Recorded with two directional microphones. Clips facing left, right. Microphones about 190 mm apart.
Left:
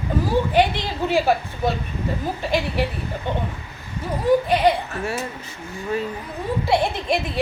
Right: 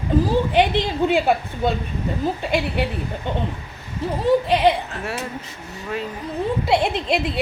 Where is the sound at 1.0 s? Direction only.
20° right (ahead or behind).